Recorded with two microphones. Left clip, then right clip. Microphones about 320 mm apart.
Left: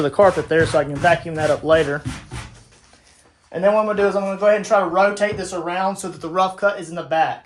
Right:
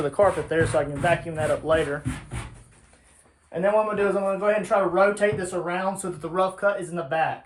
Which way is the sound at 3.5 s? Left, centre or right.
Left.